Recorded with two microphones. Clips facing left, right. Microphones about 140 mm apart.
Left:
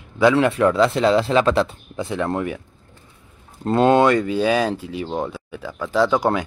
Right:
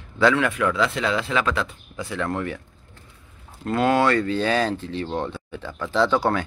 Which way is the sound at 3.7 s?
25° left (ahead or behind).